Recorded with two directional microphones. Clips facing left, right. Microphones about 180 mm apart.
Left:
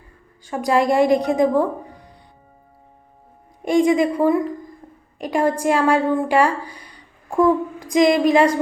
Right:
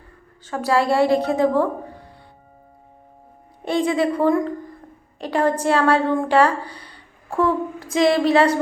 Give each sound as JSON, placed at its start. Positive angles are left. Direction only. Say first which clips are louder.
{"t": 0.4, "sound": "a woman's voice", "louder": "left 1 dB", "side_deg": 15}
{"t": 3.6, "sound": "a woman's voice", "louder": "left 4 dB", "side_deg": 15}